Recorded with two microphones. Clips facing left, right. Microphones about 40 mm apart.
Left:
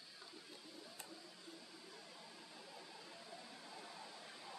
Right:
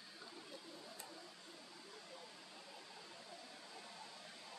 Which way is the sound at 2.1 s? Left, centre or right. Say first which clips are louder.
Right 1 dB; centre.